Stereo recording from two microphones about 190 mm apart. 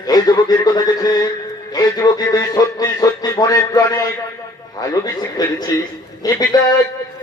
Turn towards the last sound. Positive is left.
turn(degrees=20)  # may be behind; listen again after turning